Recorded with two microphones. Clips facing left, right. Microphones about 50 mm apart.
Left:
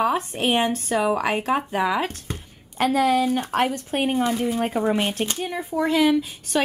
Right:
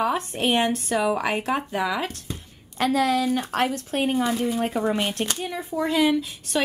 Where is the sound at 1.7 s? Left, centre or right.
Centre.